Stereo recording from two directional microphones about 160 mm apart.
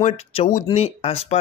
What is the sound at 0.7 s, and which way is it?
Speech, 40° left (ahead or behind).